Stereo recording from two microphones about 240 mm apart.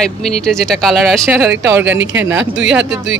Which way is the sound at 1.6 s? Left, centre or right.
Centre.